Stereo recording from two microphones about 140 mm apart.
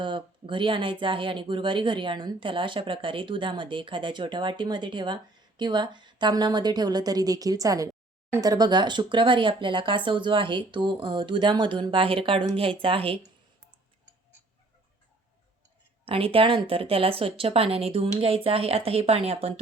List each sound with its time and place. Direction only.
0.0 s speech: 35° right (ahead or behind)
16.0 s speech: 40° right (ahead or behind)